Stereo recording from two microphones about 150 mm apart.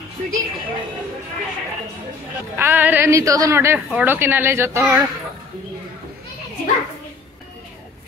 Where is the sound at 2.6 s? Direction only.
15° right (ahead or behind).